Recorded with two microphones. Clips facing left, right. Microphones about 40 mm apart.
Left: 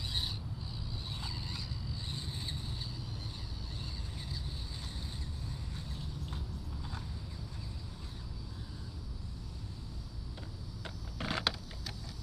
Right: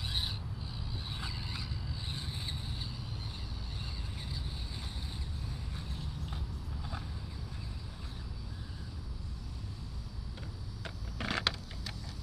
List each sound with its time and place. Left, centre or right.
1.1 s vehicle: centre
11.2 s vehicle: centre